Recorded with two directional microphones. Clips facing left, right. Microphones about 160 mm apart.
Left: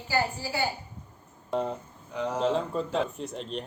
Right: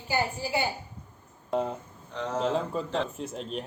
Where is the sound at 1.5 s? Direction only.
Centre (ahead or behind).